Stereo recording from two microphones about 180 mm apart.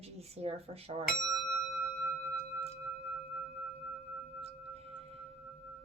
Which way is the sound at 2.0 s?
15° right (ahead or behind).